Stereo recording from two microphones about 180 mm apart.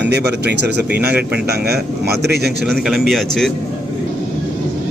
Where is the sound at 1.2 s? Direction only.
10° right (ahead or behind).